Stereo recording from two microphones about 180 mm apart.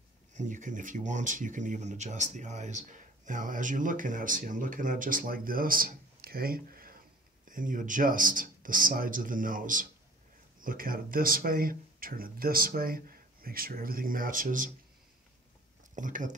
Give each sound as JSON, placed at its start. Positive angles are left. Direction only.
{"t": 0.3, "sound": "speech", "side_deg": -45}
{"t": 15.9, "sound": "speech", "side_deg": -45}